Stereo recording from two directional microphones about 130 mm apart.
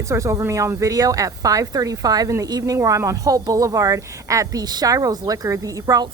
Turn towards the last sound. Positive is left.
turn(degrees=-25)  # may be behind; listen again after turning